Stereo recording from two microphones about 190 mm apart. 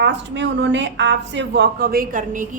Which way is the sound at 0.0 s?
70° right (ahead or behind).